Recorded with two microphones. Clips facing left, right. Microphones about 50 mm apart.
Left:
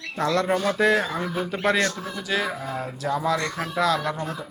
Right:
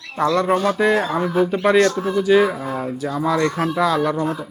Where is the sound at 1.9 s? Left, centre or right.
Right.